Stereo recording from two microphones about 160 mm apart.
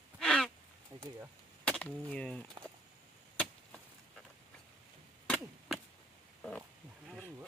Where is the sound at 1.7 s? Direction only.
5° left (ahead or behind).